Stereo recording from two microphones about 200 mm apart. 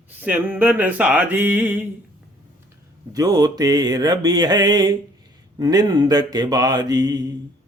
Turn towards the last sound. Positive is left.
turn(degrees=-20)  # may be behind; listen again after turning